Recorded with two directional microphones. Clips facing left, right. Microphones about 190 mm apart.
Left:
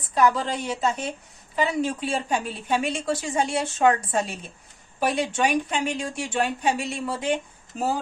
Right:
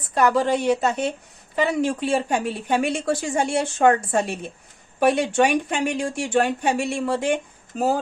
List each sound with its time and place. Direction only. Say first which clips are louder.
0.1 s a woman's voice: right 3 dB; 55° right (ahead or behind)